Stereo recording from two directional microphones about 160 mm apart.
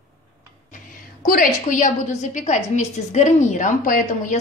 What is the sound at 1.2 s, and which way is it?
A woman's voice, 60° left (ahead or behind).